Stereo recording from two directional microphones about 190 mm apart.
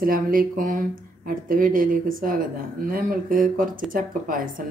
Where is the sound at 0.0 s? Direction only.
50° right (ahead or behind).